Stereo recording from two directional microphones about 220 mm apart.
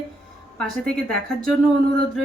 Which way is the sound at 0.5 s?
5° left (ahead or behind).